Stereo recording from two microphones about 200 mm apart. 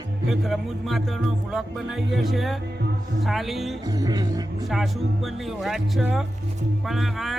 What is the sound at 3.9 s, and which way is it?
Speech, 20° right (ahead or behind).